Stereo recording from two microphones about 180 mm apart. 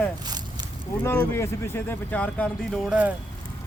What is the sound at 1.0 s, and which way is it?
Speech, 10° left (ahead or behind).